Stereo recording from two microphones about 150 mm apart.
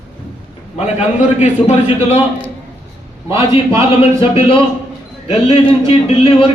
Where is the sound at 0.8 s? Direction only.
50° left (ahead or behind).